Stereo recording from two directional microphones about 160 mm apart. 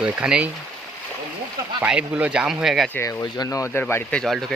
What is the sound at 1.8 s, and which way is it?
Speech, 5° right (ahead or behind).